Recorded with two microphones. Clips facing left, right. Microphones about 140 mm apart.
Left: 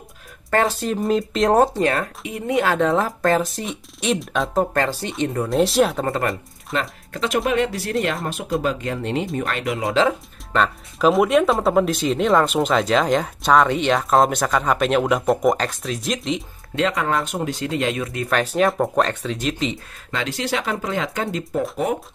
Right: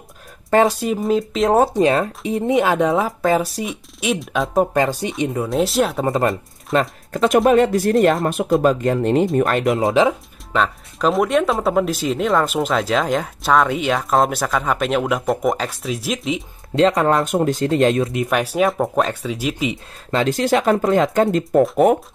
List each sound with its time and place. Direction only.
0.5 s speech: 15° right (ahead or behind)
1.8 s speech: 20° right (ahead or behind)
2.9 s speech: 5° right (ahead or behind)
4.6 s speech: 15° right (ahead or behind)
6.0 s speech: 20° right (ahead or behind)
6.8 s speech: 45° right (ahead or behind)
10.5 s speech: centre (ahead or behind)
16.7 s speech: 35° right (ahead or behind)
17.2 s speech: 50° right (ahead or behind)
18.0 s speech: 20° right (ahead or behind)
20.2 s speech: 45° right (ahead or behind)